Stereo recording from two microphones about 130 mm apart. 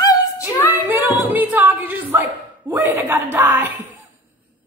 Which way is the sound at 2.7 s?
15° right (ahead or behind).